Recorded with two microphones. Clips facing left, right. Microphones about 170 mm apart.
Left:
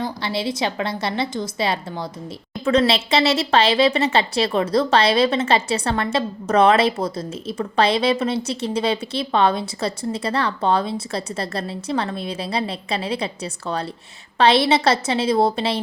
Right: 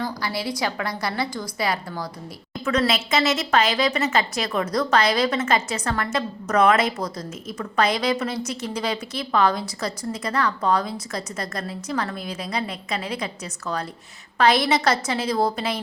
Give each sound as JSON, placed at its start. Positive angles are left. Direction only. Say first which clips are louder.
{"t": 0.0, "sound": "a woman's voice", "louder": "left 3 dB", "side_deg": 25}